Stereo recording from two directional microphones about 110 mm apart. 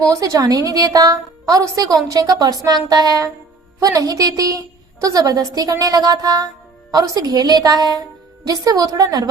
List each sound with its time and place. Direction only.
0.1 s a woman's voice: 30° right (ahead or behind)